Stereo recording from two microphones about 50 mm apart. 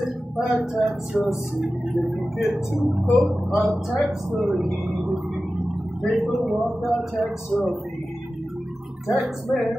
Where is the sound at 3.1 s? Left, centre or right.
Centre.